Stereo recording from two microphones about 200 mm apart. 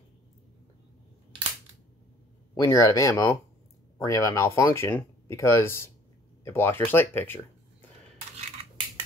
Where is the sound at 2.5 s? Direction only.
15° left (ahead or behind).